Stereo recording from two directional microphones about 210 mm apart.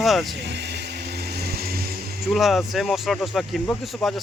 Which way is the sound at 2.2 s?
Centre (ahead or behind).